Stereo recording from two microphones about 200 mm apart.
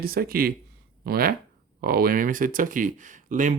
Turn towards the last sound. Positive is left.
turn(degrees=-40)  # may be behind; listen again after turning